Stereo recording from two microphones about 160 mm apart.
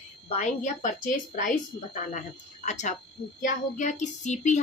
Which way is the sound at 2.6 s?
50° left (ahead or behind).